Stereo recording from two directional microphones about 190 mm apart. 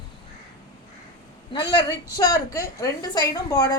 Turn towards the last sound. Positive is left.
turn(degrees=20)  # may be behind; listen again after turning